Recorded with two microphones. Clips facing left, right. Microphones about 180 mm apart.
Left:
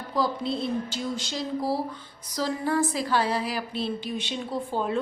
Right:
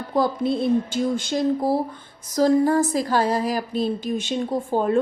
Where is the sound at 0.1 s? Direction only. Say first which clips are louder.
Right 6 dB; 50° right (ahead or behind).